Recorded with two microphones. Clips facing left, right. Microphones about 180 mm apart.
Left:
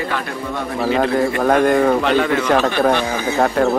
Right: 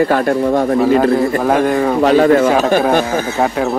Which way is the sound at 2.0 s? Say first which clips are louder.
Right 7 dB; 40° right (ahead or behind).